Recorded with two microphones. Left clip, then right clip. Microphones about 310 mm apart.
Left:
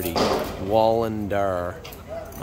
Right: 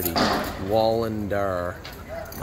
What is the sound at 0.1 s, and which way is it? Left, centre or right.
Speech, left.